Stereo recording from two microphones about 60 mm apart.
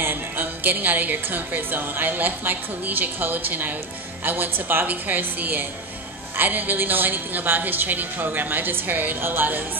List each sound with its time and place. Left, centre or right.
0.0 s a woman's voice: right